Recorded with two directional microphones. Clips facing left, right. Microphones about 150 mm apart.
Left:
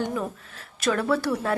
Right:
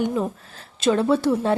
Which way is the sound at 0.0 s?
25° right (ahead or behind).